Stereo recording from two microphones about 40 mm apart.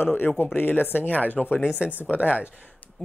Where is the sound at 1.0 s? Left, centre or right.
Left.